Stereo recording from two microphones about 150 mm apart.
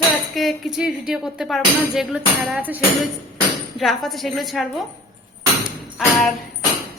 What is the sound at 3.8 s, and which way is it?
Speech, centre (ahead or behind).